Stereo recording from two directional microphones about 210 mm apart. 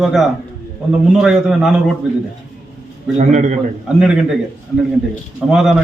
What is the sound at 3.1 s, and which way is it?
Speech, 35° right (ahead or behind).